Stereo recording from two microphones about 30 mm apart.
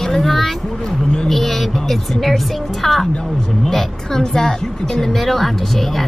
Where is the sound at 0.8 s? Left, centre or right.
Left.